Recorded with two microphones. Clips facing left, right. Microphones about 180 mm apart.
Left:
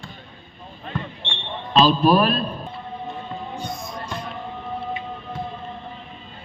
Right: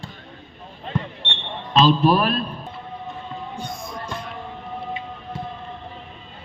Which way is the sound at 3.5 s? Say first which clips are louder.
Left 1 dB; 55° right (ahead or behind).